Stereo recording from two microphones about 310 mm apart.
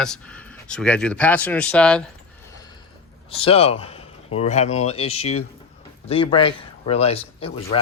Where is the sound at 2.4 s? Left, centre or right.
Centre.